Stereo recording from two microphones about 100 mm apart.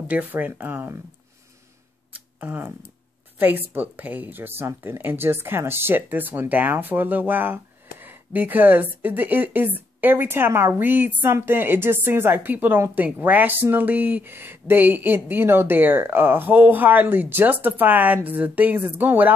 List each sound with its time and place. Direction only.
0.1 s a woman's voice: 15° right (ahead or behind)
2.1 s camera: 20° right (ahead or behind)
3.3 s a woman's voice: 20° right (ahead or behind)